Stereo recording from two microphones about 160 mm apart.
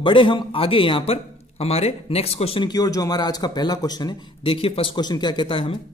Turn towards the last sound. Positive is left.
turn(degrees=30)  # may be behind; listen again after turning